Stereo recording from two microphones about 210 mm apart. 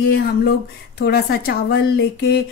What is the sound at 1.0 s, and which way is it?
A woman's voice, 50° left (ahead or behind).